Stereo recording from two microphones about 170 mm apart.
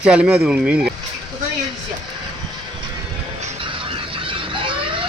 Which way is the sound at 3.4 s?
35° right (ahead or behind).